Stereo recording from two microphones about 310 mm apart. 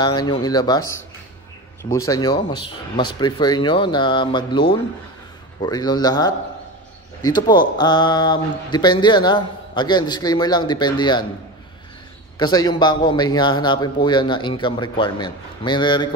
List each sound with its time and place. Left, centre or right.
0.0 s speech: centre
2.5 s speech: left
3.2 s speech: centre
12.4 s speech: centre